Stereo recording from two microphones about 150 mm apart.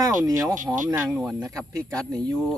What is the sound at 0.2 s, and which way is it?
Speech, 20° right (ahead or behind).